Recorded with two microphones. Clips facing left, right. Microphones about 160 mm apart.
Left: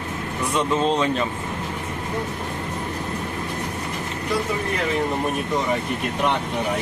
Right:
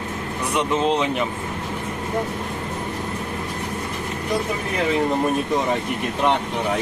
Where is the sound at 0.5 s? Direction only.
15° right (ahead or behind).